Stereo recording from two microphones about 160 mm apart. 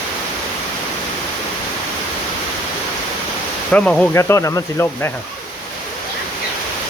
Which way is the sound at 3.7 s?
5° left (ahead or behind).